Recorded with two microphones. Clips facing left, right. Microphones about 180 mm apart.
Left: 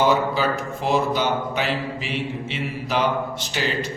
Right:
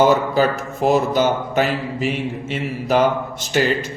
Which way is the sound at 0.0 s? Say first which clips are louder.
Right 5 dB; 45° right (ahead or behind).